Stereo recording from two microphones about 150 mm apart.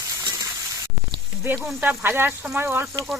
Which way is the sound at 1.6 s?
5° right (ahead or behind).